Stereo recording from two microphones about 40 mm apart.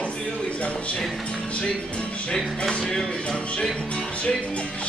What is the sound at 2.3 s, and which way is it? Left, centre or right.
Music, centre.